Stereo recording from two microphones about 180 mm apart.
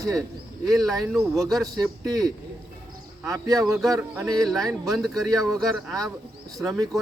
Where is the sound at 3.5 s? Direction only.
20° right (ahead or behind).